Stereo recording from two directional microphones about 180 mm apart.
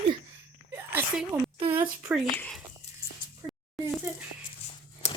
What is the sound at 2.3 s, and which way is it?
Speech, 10° left (ahead or behind).